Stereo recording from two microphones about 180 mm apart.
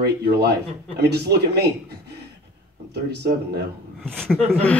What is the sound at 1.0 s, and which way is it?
Speech, 65° right (ahead or behind).